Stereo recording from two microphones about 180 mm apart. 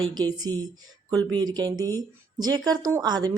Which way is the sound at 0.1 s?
20° right (ahead or behind).